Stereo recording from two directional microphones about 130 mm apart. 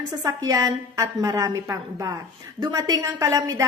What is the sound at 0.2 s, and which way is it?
A woman's voice, 25° right (ahead or behind).